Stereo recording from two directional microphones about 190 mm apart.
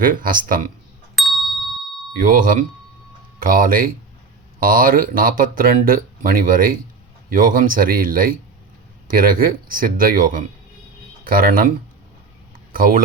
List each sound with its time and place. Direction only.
0.0 s speech: 45° right (ahead or behind)
1.1 s ding: centre (ahead or behind)
2.1 s speech: 45° right (ahead or behind)